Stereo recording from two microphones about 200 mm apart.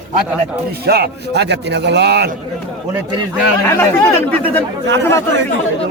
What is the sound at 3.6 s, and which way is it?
Speech, 10° left (ahead or behind).